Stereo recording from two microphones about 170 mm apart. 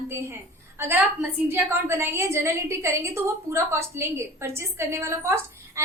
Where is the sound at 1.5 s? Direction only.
15° right (ahead or behind).